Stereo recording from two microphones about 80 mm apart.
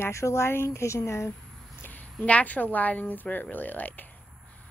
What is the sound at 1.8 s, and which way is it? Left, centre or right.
Speech, centre.